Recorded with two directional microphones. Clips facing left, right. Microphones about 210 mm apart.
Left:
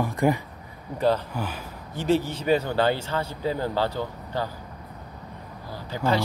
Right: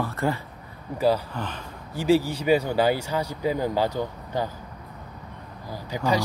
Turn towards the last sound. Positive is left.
turn(degrees=-15)  # may be behind; listen again after turning